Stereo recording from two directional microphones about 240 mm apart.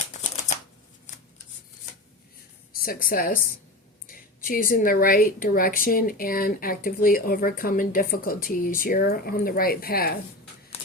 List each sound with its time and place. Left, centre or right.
0.1 s typewriter: left
2.8 s speech: left